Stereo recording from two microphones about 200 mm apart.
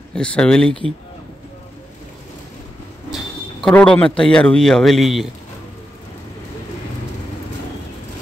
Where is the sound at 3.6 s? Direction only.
5° left (ahead or behind).